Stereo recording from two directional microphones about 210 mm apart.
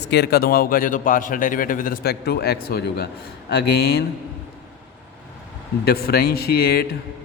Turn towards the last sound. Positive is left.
turn(degrees=50)  # may be behind; listen again after turning